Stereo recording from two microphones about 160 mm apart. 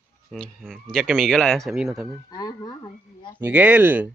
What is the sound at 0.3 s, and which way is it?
Speech, centre (ahead or behind).